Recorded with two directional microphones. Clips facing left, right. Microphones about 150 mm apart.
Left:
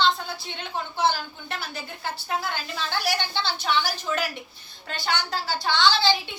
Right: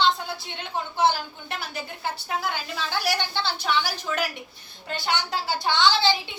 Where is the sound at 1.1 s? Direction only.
15° right (ahead or behind).